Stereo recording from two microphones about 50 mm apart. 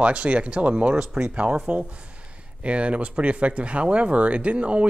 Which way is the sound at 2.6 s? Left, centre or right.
Right.